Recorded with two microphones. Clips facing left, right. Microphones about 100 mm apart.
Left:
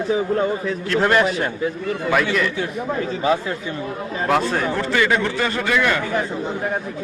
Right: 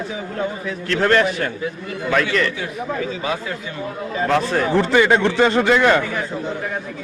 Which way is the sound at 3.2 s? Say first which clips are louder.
Left 5 dB; 30° left (ahead or behind).